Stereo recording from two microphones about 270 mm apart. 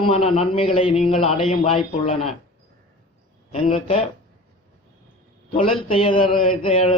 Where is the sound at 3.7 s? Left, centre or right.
Centre.